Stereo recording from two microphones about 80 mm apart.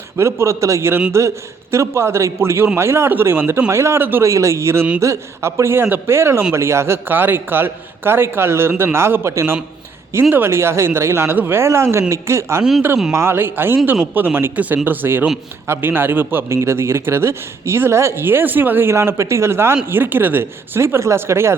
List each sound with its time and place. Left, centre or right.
0.2 s a man's voice: right